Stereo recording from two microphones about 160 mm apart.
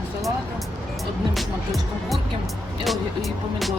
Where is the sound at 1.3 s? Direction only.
Centre (ahead or behind).